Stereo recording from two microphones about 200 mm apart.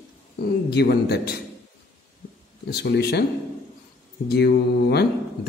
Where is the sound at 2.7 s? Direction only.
55° left (ahead or behind).